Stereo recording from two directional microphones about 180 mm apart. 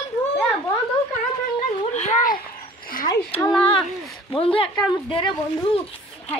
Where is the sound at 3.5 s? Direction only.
Centre (ahead or behind).